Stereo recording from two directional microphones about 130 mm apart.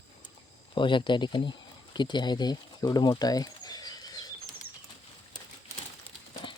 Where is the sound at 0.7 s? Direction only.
40° left (ahead or behind).